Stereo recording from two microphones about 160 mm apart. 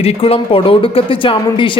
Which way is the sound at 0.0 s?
40° left (ahead or behind).